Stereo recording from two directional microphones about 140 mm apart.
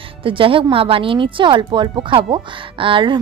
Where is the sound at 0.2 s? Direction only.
40° right (ahead or behind).